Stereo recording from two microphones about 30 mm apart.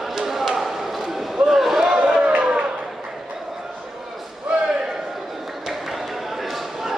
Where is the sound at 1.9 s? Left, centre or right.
Right.